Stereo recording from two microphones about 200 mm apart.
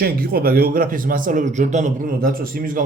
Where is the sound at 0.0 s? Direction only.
50° right (ahead or behind).